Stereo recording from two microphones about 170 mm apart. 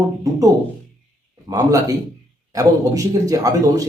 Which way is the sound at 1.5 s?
20° right (ahead or behind).